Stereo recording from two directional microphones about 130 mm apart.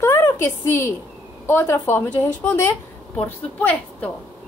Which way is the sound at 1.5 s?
15° left (ahead or behind).